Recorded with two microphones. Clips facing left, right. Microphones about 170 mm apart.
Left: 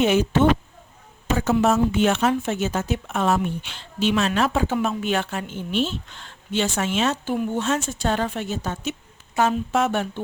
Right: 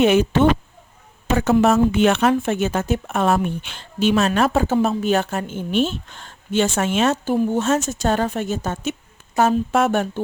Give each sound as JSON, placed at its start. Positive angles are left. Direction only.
{"t": 0.0, "sound": "a woman's voice", "side_deg": -60}
{"t": 1.6, "sound": "speech", "side_deg": -70}
{"t": 7.3, "sound": "speech", "side_deg": -40}